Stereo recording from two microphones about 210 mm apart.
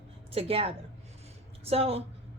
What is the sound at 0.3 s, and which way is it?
A woman's voice, 30° right (ahead or behind).